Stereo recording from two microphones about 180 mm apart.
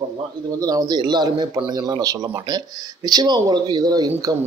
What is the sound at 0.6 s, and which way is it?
Speech, 20° right (ahead or behind).